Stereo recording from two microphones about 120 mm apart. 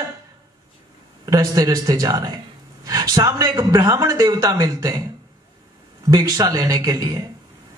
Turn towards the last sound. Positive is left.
turn(degrees=-30)  # may be behind; listen again after turning